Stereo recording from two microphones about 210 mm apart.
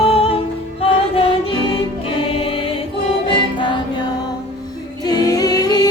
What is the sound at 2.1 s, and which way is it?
Music, 25° left (ahead or behind).